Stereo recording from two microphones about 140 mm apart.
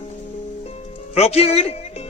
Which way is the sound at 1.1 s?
45° left (ahead or behind).